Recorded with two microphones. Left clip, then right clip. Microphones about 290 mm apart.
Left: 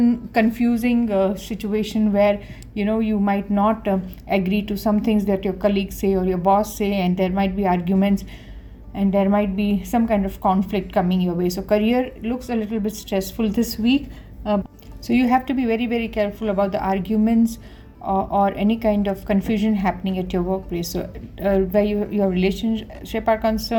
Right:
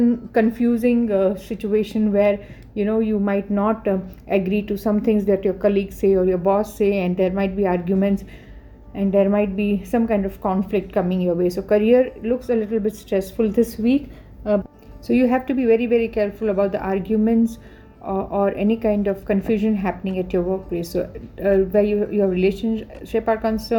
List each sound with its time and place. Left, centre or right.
0.0 s speech: left
15.0 s speech: left